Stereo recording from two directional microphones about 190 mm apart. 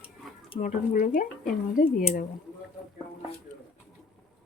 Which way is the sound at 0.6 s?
45° left (ahead or behind).